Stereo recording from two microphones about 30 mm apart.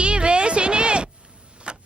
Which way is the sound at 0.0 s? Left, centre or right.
Right.